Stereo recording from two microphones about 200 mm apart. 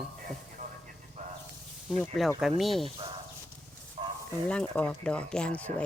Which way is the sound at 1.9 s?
Centre (ahead or behind).